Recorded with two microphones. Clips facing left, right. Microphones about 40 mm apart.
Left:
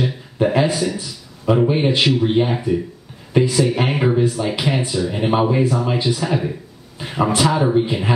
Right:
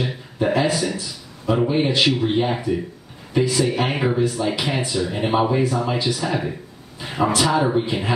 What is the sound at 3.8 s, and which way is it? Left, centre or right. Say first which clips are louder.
Speech: left 3 dB; centre.